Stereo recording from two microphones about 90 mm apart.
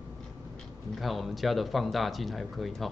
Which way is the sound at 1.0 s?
Centre (ahead or behind).